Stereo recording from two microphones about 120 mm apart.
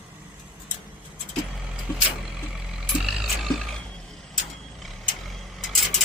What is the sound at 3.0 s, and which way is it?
Music, 5° right (ahead or behind).